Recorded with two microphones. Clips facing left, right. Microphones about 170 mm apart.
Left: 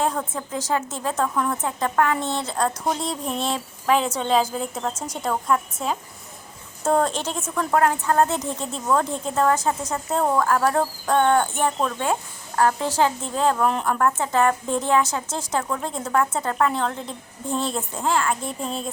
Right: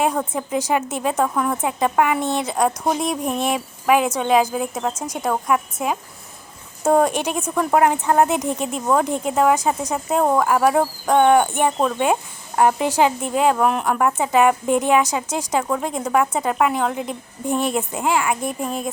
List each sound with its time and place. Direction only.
0.0 s a woman's voice: 15° right (ahead or behind)